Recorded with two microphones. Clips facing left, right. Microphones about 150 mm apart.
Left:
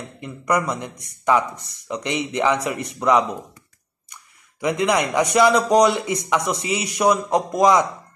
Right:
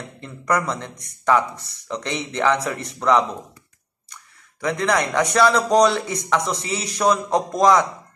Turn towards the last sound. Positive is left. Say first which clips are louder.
# even
turn(degrees=15)  # may be behind; listen again after turning